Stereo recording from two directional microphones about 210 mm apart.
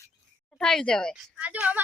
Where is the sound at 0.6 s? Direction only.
5° left (ahead or behind).